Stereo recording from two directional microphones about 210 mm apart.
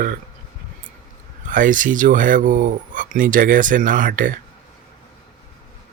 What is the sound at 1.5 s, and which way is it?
Speech, 40° right (ahead or behind).